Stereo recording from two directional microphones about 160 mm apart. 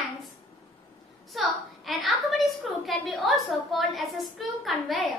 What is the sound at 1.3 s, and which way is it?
A woman's voice, centre (ahead or behind).